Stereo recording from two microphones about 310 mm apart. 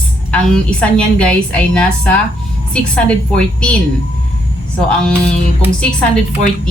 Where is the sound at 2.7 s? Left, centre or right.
Centre.